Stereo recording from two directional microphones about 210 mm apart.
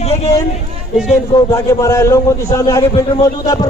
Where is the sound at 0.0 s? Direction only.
30° left (ahead or behind).